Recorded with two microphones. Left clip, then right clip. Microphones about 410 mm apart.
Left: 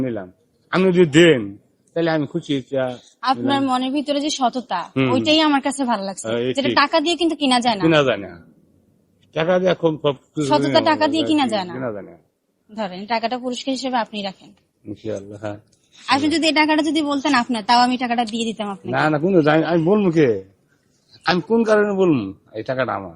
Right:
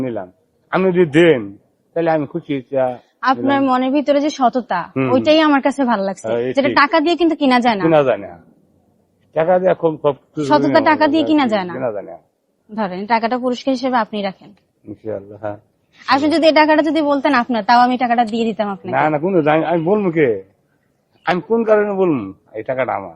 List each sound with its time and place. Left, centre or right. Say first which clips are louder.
0.0 s speech: right 2 dB; right
3.2 s a woman's voice: right 4 dB; right
6.2 s speech: right 3 dB; centre
6.6 s a woman's voice: right 4 dB; right
7.9 s speech: right 2 dB; right
9.3 s speech: right 4 dB; centre
10.4 s a woman's voice: right 4 dB; right
11.8 s speech: right 6 dB; right
12.7 s a woman's voice: right 6 dB; right
15.0 s speech: right 3 dB; right
16.0 s a woman's voice: right 5 dB; right
18.9 s a man's voice: right 1 dB; centre